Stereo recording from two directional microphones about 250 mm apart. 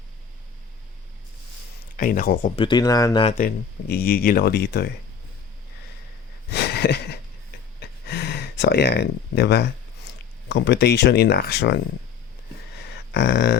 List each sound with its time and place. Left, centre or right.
2.0 s speech: left
2.6 s speech: centre
3.3 s speech: left
6.5 s a sound: left
10.5 s speech: left
13.1 s speech: left